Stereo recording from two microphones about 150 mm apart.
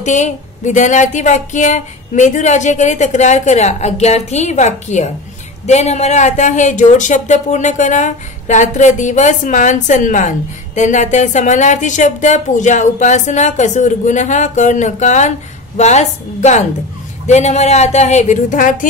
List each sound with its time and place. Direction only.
0.0 s speech: 50° left (ahead or behind)